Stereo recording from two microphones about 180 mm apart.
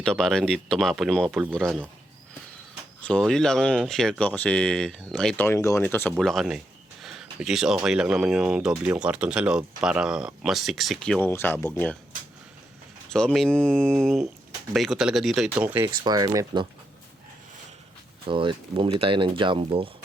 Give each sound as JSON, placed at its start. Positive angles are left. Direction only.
{"t": 0.0, "sound": "speech", "side_deg": 5}
{"t": 3.0, "sound": "speech", "side_deg": 5}
{"t": 7.0, "sound": "a sound", "side_deg": 0}
{"t": 7.9, "sound": "speech", "side_deg": -5}
{"t": 13.1, "sound": "speech", "side_deg": 5}
{"t": 15.9, "sound": "speech", "side_deg": -20}
{"t": 18.3, "sound": "speech", "side_deg": -30}